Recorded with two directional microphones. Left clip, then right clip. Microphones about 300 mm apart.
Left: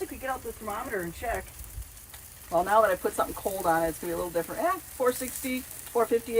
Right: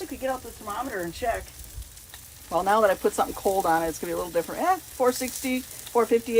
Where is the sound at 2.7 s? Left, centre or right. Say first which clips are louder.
Right 3 dB; centre.